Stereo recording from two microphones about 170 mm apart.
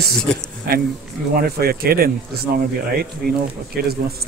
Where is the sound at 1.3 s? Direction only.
65° right (ahead or behind).